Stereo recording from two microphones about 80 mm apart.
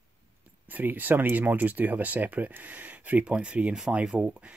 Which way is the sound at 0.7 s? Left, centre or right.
Right.